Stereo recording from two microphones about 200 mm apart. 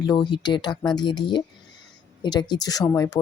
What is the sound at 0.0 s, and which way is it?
Speech, 20° left (ahead or behind).